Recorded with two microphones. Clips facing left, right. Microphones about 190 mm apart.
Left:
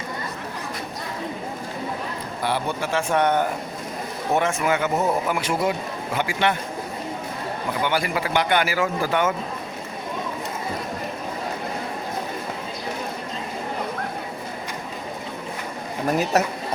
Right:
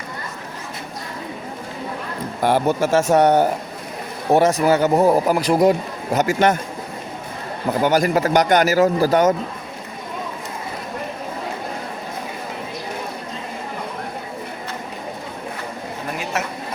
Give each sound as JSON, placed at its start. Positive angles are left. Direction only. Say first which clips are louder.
{"t": 2.4, "sound": "a man's voice", "louder": "right 8 dB", "side_deg": -45}
{"t": 7.7, "sound": "a man's voice", "louder": "right 8 dB", "side_deg": -40}
{"t": 16.3, "sound": "speech", "louder": "left 4 dB", "side_deg": 40}